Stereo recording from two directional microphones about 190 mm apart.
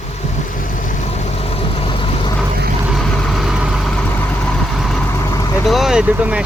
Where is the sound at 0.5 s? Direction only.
45° left (ahead or behind); by 2.3 s 25° left (ahead or behind).